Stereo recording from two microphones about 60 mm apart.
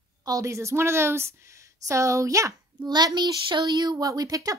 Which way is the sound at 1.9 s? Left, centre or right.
Right.